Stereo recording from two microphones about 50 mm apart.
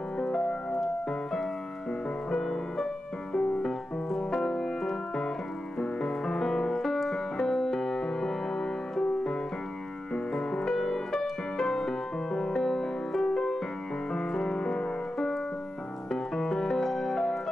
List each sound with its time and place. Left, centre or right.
0.2 s music: centre
2.3 s music: centre